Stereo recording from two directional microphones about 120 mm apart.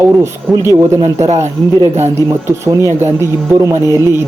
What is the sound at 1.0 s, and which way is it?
Speech, 25° right (ahead or behind).